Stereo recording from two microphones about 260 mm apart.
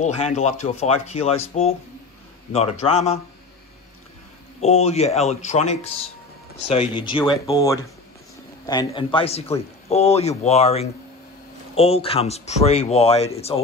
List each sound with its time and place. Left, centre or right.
0.0 s a man's voice: left
4.6 s a man's voice: left